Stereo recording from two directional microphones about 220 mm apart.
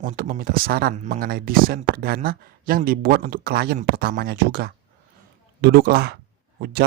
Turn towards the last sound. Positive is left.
turn(degrees=-45)  # may be behind; listen again after turning